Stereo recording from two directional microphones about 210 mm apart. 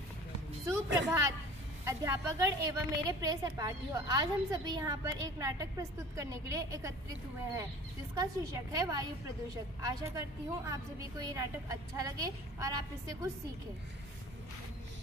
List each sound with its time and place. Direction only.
0.9 s a woman's voice: 15° right (ahead or behind)
8.1 s a woman's voice: 15° right (ahead or behind)